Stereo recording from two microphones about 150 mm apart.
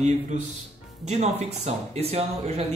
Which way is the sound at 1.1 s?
45° right (ahead or behind).